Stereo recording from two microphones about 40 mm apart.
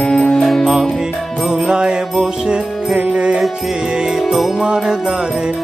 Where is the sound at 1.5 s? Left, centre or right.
Centre.